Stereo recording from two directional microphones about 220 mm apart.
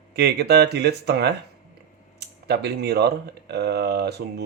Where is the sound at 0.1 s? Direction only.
45° right (ahead or behind).